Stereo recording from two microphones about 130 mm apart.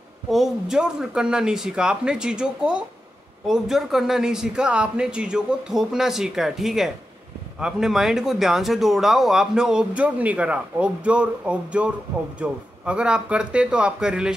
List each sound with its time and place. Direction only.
0.3 s speech: 5° right (ahead or behind)